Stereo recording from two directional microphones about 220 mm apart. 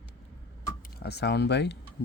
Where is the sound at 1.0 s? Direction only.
50° left (ahead or behind).